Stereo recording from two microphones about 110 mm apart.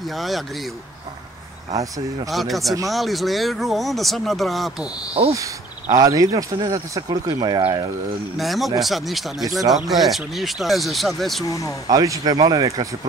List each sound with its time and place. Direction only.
0.0 s speech: centre (ahead or behind)
1.7 s speech: 30° right (ahead or behind)
2.3 s speech: centre (ahead or behind)
5.3 s speech: 30° right (ahead or behind)
8.4 s speech: centre (ahead or behind)
11.4 s speech: 30° left (ahead or behind)
11.9 s speech: 35° right (ahead or behind)